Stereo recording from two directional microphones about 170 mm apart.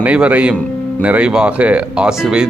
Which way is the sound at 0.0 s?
10° right (ahead or behind).